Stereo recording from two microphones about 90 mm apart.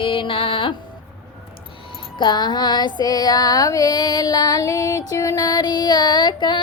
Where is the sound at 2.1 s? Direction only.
55° left (ahead or behind).